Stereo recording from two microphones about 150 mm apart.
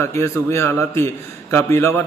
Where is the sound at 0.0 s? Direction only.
15° left (ahead or behind).